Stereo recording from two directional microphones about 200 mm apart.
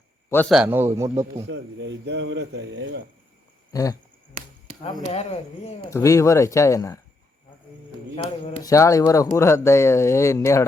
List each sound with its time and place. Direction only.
0.3 s a man's voice: 10° left (ahead or behind)
0.5 s speech: 10° right (ahead or behind)
1.5 s a man's voice: 65° right (ahead or behind)
3.7 s a sound: 15° left (ahead or behind)
4.8 s speech: 20° left (ahead or behind)
5.0 s speech: 30° left (ahead or behind)
5.9 s speech: 15° left (ahead or behind)
8.6 s speech: 15° left (ahead or behind)